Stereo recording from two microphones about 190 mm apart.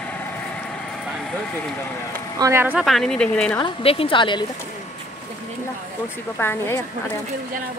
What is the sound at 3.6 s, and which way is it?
Speech, 30° left (ahead or behind).